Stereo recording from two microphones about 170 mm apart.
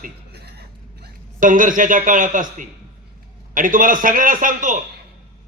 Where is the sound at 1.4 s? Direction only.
50° right (ahead or behind).